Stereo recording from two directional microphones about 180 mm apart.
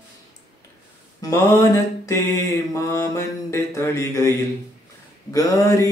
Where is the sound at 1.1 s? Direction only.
15° left (ahead or behind).